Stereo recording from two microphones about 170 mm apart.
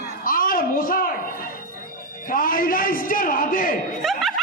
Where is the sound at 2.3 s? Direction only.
55° left (ahead or behind).